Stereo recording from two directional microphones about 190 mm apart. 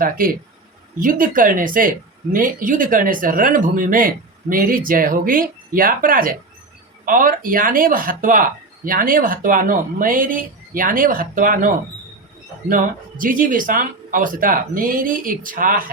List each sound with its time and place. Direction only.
0.2 s speech: 50° right (ahead or behind)